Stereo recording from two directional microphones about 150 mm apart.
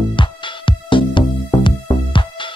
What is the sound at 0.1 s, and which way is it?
Music, 35° left (ahead or behind).